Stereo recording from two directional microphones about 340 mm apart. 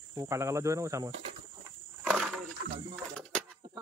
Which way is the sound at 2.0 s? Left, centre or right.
Centre.